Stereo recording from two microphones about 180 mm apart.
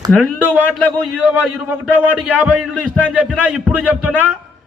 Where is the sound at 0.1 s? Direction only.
10° right (ahead or behind).